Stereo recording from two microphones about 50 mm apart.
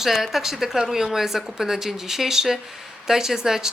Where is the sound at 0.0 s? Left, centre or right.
Centre.